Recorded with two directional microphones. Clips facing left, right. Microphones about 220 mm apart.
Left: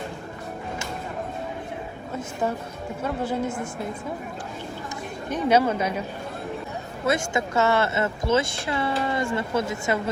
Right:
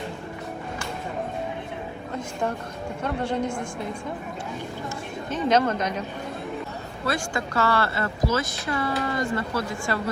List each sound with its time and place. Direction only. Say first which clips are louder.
2.1 s a man's voice: left 1 dB; 5° left (ahead or behind)
5.3 s speech: left 1 dB; 10° left (ahead or behind)
7.0 s speech: left 4 dB; 20° left (ahead or behind)